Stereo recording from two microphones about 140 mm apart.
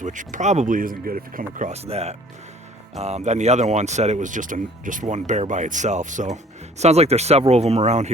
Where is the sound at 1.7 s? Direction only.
45° right (ahead or behind).